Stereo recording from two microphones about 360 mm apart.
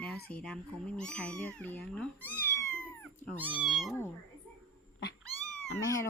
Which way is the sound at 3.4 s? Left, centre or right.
Centre.